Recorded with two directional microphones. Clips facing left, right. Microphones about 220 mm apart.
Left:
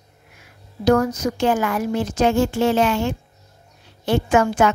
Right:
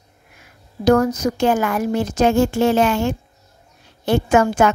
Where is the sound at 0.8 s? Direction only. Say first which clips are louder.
Right 2 dB; 40° right (ahead or behind).